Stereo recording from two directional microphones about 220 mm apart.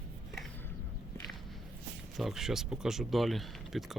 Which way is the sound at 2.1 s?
Centre (ahead or behind).